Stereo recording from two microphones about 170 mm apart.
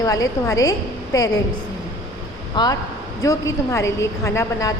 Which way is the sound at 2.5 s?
25° left (ahead or behind).